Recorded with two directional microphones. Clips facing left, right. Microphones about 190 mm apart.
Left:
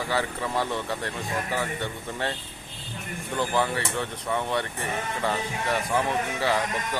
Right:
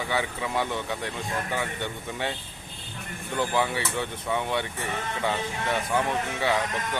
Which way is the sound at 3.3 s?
Centre (ahead or behind).